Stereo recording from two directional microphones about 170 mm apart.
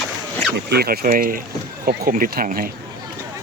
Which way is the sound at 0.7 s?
65° right (ahead or behind).